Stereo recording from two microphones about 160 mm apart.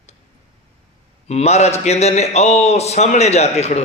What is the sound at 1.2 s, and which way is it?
A man's voice, 40° left (ahead or behind).